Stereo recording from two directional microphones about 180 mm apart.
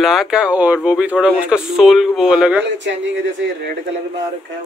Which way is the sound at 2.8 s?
90° right.